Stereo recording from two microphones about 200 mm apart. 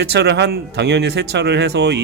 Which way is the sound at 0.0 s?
55° right (ahead or behind).